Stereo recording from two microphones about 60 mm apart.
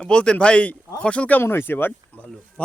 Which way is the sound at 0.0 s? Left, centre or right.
Centre.